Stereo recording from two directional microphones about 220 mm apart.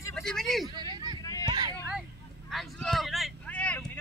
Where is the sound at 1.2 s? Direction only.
15° left (ahead or behind).